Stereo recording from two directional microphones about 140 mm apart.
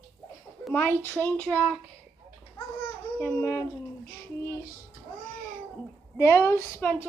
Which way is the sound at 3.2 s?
15° left (ahead or behind).